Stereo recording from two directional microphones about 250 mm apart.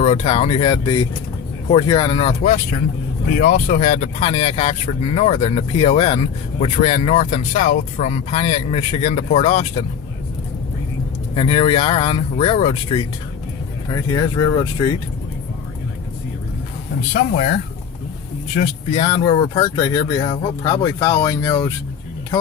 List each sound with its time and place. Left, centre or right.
0.0 s speech: left
11.3 s speech: left
14.1 s speech: centre
18.5 s speech: left